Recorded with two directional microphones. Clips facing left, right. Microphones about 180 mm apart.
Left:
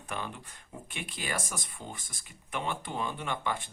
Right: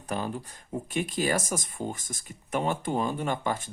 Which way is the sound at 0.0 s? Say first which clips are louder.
Right 7 dB; 40° right (ahead or behind).